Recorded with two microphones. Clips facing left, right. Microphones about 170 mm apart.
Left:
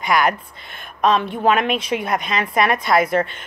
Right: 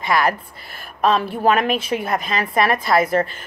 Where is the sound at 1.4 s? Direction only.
40° right (ahead or behind).